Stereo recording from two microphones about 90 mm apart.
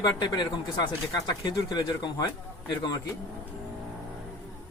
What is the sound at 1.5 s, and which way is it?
Speech, 55° left (ahead or behind).